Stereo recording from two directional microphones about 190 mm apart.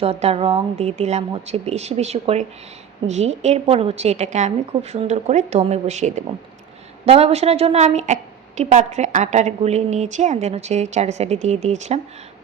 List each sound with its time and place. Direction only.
0.0 s a woman's voice: 30° right (ahead or behind)